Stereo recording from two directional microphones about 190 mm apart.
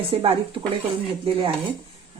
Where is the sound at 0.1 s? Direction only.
30° right (ahead or behind).